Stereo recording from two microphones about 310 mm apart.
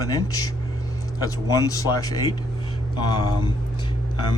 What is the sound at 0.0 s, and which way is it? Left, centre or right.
A man's voice, centre.